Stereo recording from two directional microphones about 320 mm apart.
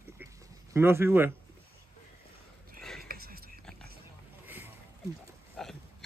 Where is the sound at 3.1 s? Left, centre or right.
Right.